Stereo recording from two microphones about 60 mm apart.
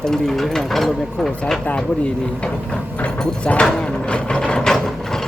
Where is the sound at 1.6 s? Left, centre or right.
Centre.